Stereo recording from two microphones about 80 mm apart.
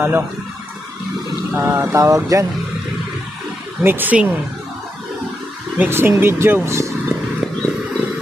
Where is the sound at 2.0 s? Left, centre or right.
Right.